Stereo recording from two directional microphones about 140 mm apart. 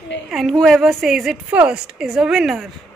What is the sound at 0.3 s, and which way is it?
A woman's voice, centre (ahead or behind).